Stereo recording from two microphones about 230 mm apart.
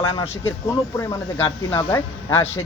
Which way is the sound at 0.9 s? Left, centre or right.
Centre.